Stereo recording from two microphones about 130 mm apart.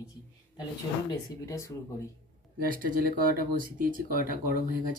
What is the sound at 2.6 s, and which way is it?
Speech, 90° right.